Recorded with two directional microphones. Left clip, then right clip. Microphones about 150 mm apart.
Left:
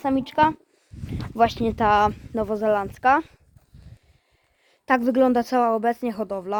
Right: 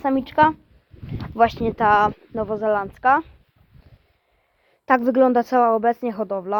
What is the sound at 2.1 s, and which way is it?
Speech, 45° left (ahead or behind).